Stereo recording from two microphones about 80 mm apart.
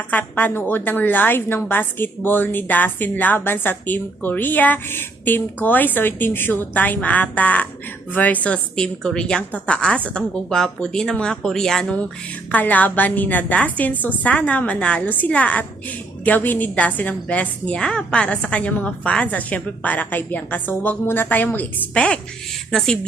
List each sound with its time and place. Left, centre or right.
0.1 s a woman's voice: left